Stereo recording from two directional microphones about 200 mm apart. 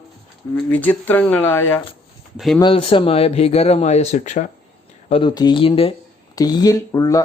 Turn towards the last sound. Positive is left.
turn(degrees=15)  # may be behind; listen again after turning